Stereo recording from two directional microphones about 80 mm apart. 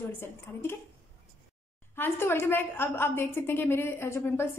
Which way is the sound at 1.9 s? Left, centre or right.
Left.